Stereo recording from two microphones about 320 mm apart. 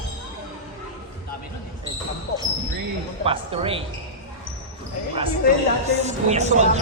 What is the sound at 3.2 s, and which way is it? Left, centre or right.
Speech, centre.